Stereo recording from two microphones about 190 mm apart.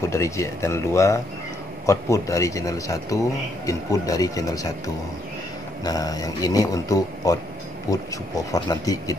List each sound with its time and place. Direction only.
0.1 s speech: 15° left (ahead or behind)